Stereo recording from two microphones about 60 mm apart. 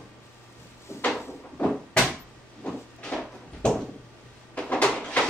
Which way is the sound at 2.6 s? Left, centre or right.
Centre.